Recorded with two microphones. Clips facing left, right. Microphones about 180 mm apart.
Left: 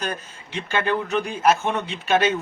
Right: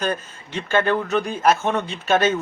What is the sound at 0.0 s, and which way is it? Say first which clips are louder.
A man's voice: right 5 dB; 15° left (ahead or behind).